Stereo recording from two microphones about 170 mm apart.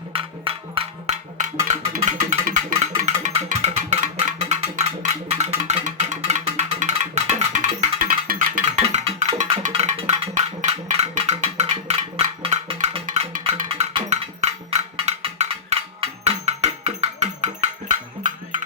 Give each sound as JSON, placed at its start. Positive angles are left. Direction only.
{"t": 0.1, "sound": "music", "side_deg": -30}
{"t": 8.8, "sound": "music", "side_deg": -40}